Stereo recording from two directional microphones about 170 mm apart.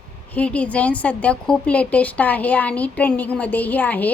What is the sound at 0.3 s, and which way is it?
A woman's voice, 5° left (ahead or behind).